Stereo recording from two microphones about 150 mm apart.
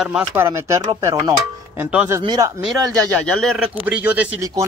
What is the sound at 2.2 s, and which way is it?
Speech, 25° right (ahead or behind).